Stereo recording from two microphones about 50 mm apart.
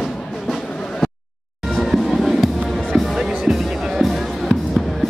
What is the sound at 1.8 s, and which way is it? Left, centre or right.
Music, centre.